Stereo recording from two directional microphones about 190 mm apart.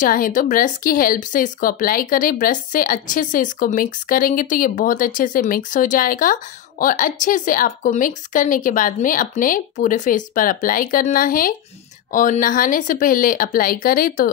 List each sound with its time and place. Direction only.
0.0 s speech: 45° left (ahead or behind)